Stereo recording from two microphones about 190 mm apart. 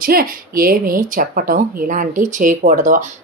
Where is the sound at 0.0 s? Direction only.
50° right (ahead or behind).